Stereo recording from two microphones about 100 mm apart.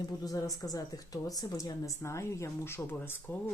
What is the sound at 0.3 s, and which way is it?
A woman's voice, 35° left (ahead or behind).